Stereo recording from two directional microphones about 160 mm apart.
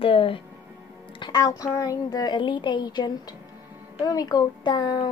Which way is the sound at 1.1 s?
25° left (ahead or behind).